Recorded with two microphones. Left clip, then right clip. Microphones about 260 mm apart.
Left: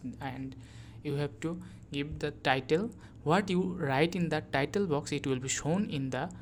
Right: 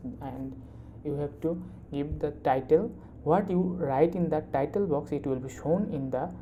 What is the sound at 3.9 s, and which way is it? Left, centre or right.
Speech, left.